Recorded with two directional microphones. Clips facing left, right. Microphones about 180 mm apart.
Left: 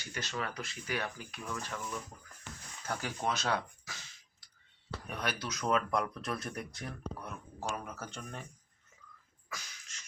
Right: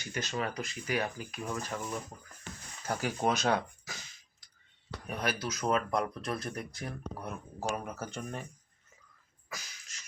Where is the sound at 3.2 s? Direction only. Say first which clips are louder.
Right 4 dB; 15° right (ahead or behind).